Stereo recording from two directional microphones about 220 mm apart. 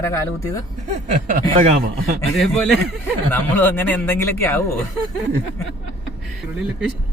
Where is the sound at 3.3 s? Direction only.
10° left (ahead or behind).